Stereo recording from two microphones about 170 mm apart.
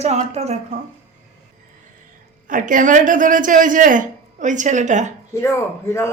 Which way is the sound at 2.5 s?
50° right (ahead or behind).